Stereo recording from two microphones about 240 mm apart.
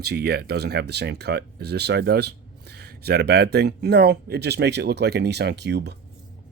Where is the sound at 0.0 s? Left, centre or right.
Right.